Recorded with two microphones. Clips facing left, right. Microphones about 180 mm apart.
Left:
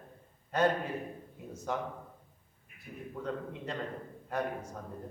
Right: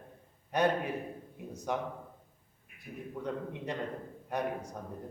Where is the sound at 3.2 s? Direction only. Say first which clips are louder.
Even; 15° right (ahead or behind).